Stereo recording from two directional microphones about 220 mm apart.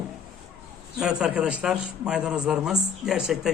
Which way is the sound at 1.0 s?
5° right (ahead or behind).